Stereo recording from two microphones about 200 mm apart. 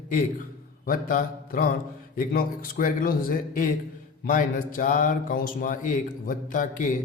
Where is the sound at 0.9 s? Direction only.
45° left (ahead or behind).